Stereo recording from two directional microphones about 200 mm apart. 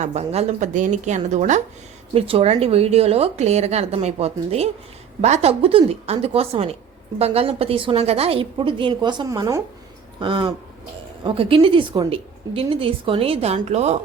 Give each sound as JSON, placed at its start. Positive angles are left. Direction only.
{"t": 0.0, "sound": "a woman's voice", "side_deg": -30}